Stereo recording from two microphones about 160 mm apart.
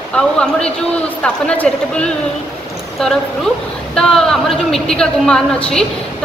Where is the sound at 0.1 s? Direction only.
5° left (ahead or behind).